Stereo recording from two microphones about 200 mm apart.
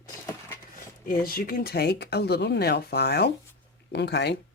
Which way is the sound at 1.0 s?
45° left (ahead or behind).